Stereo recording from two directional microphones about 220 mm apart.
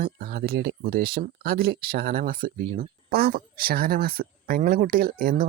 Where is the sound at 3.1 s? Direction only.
45° right (ahead or behind).